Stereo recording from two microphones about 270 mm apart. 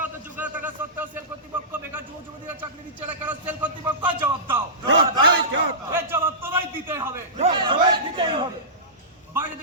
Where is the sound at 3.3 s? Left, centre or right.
Centre.